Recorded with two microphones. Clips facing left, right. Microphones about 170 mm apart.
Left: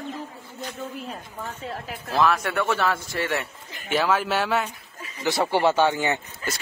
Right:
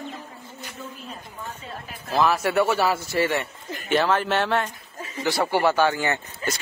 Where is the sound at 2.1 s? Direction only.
Centre (ahead or behind).